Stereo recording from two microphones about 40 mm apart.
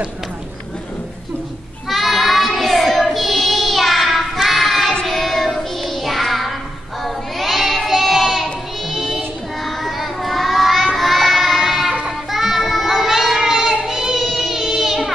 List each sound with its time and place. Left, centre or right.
1.9 s child singing: centre
11.0 s a sound: centre
12.3 s child singing: centre